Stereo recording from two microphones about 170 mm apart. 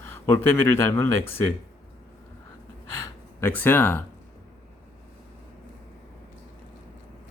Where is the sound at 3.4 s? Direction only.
10° left (ahead or behind).